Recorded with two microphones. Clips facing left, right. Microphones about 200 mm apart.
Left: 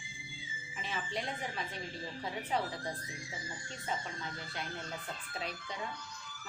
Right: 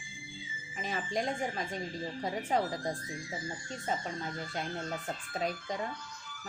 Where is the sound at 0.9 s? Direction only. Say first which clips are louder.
Right 6 dB; 45° right (ahead or behind).